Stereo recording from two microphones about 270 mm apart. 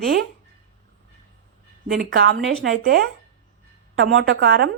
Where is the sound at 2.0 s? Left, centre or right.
Right.